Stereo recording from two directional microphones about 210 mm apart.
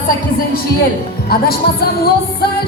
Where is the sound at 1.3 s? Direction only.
50° left (ahead or behind).